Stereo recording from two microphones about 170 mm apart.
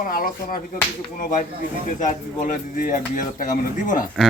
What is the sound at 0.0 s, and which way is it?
Speech, 55° left (ahead or behind).